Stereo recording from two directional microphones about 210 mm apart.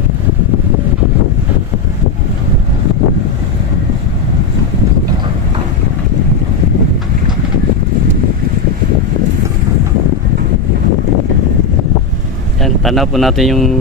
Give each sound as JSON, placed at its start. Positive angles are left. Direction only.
{"t": 12.6, "sound": "speech", "side_deg": 0}